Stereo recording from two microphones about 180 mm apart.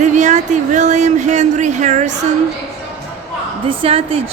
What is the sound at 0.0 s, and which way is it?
Speech, 40° right (ahead or behind).